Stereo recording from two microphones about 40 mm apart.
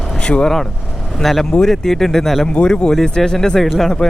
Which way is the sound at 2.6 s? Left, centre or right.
Left.